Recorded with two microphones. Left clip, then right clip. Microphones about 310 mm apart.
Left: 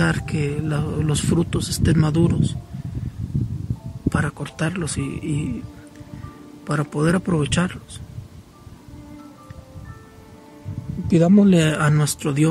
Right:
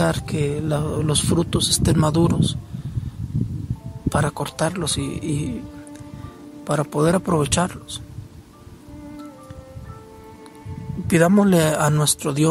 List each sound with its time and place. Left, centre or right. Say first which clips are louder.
0.0 s speech: right 1 dB; centre
4.1 s speech: right 3 dB; centre
6.6 s speech: right 3 dB; centre
11.1 s speech: even; right